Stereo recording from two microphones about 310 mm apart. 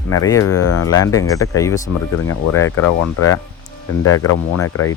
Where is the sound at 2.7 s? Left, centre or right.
Left.